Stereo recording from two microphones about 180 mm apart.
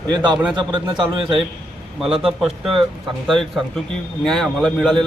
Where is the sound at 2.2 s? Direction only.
5° right (ahead or behind).